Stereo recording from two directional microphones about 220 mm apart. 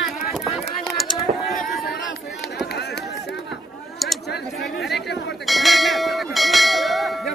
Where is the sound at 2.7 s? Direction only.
50° left (ahead or behind).